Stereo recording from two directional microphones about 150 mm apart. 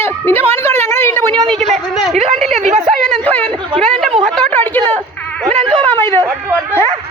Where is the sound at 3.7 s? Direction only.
40° right (ahead or behind).